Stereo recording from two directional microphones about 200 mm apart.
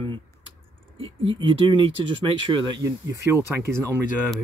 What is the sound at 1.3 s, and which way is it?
Speech, 25° right (ahead or behind).